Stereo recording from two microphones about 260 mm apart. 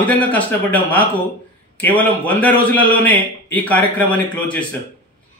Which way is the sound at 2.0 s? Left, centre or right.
Centre.